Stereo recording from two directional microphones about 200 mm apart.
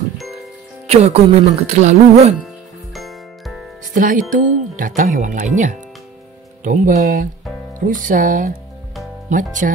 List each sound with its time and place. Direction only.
0.8 s speech: 30° right (ahead or behind)
2.4 s music: centre (ahead or behind)
3.9 s speech: 40° right (ahead or behind)